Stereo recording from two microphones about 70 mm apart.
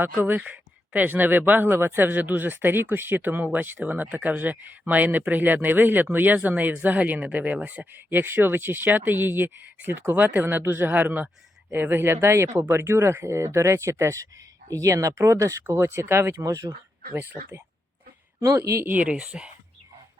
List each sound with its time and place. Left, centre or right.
0.0 s speech: right
16.4 s speech: right
17.2 s speech: right
18.3 s speech: right
18.9 s speech: centre